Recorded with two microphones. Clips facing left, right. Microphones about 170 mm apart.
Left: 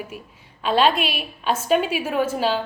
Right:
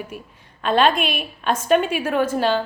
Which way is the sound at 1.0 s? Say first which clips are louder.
Right 2 dB; 50° right (ahead or behind).